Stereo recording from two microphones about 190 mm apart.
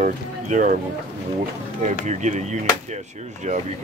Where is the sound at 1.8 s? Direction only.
40° right (ahead or behind).